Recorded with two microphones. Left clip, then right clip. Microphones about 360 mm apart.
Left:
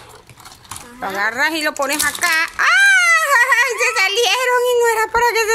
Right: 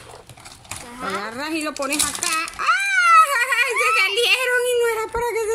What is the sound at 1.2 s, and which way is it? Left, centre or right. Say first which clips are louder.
Speech: left 9 dB; left.